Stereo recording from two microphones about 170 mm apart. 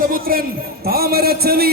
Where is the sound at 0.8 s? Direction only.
65° right (ahead or behind).